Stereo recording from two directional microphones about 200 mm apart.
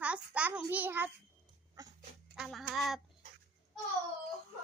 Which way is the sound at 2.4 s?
Centre (ahead or behind).